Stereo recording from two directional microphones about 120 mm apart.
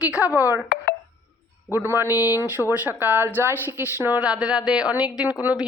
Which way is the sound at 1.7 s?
20° right (ahead or behind).